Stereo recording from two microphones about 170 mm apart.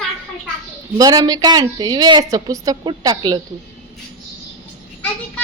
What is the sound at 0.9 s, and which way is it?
A woman's voice, 20° right (ahead or behind).